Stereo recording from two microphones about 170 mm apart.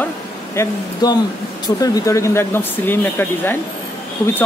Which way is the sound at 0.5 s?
25° left (ahead or behind).